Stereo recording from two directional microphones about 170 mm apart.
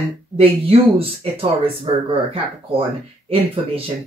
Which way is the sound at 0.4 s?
35° right (ahead or behind).